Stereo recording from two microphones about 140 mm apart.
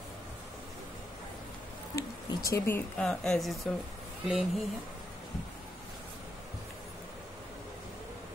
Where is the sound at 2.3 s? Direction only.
20° left (ahead or behind).